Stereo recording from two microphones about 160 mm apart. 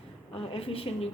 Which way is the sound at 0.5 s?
35° left (ahead or behind).